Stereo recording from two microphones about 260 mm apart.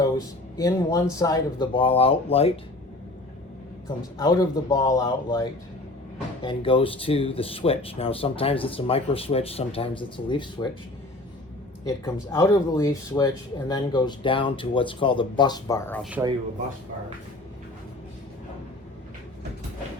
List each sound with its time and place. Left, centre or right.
0.0 s speech: centre
3.8 s speech: centre
11.9 s speech: centre
16.2 s speech: centre